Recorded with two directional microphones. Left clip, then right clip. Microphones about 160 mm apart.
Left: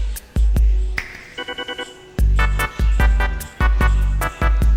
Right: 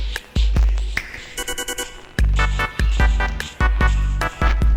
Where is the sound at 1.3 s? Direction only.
Centre (ahead or behind).